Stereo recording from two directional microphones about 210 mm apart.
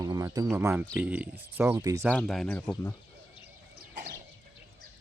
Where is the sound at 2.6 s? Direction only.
15° left (ahead or behind).